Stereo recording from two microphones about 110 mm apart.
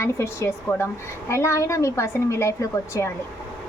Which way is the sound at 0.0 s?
25° left (ahead or behind).